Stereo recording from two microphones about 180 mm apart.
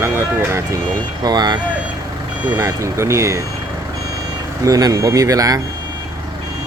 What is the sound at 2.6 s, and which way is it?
Speech, 20° right (ahead or behind).